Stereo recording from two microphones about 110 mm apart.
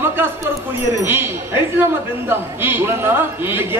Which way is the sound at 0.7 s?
20° right (ahead or behind).